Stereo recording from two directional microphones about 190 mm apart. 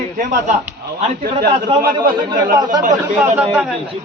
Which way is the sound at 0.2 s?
40° right (ahead or behind).